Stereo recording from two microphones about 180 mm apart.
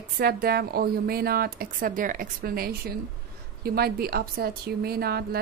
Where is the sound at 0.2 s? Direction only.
60° right (ahead or behind).